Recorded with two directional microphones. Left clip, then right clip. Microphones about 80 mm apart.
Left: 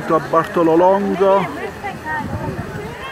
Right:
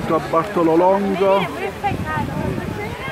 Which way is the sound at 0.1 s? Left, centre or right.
Left.